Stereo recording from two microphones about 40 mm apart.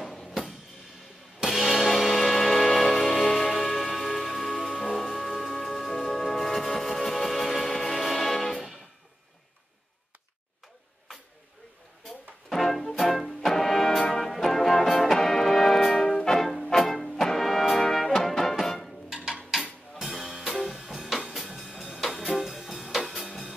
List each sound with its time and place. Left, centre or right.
1.5 s music: centre
12.4 s music: centre
16.1 s music: centre
16.3 s music: centre
19.6 s music: centre
21.5 s music: centre